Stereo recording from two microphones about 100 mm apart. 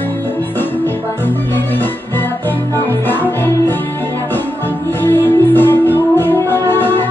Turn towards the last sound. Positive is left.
turn(degrees=20)  # may be behind; listen again after turning